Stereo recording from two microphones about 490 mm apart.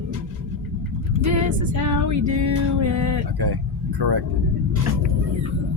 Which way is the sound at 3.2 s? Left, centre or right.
Right.